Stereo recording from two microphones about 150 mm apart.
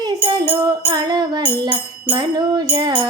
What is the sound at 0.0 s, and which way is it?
Music, 25° right (ahead or behind).